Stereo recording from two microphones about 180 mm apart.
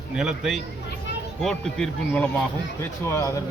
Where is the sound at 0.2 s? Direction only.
Centre (ahead or behind).